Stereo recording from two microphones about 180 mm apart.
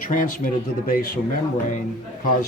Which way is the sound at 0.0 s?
50° left (ahead or behind).